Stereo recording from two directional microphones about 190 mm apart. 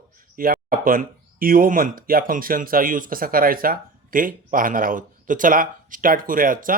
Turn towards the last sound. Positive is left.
turn(degrees=-45)  # may be behind; listen again after turning